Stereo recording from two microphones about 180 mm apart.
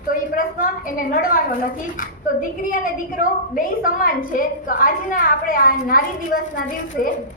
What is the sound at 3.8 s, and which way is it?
A woman's voice, 50° left (ahead or behind).